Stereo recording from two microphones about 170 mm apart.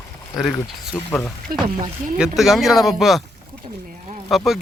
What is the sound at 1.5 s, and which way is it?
Speech, 55° right (ahead or behind).